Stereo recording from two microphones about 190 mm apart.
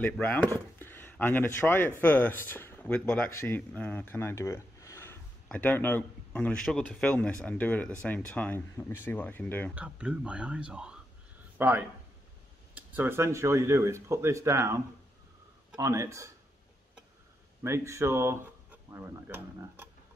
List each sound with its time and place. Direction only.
0.0 s speech: 10° left (ahead or behind)
9.8 s speech: 5° right (ahead or behind)
11.5 s a sound: 10° right (ahead or behind)
12.7 s speech: 10° right (ahead or behind)
17.6 s speech: 15° right (ahead or behind)